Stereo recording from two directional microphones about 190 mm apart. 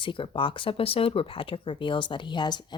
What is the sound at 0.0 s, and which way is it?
Speech, 25° left (ahead or behind).